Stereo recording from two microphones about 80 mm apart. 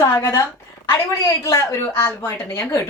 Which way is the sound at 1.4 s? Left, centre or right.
Left.